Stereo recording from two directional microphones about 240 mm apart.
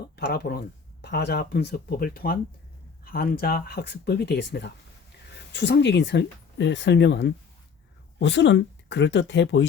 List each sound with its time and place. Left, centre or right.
0.2 s speech: left